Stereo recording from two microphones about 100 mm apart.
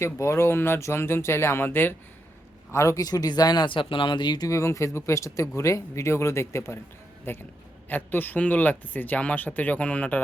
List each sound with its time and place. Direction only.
0.0 s speech: 30° left (ahead or behind)
2.7 s speech: 30° left (ahead or behind); by 4.4 s 50° left (ahead or behind)
4.4 s speech: 30° left (ahead or behind); by 10.2 s 15° left (ahead or behind)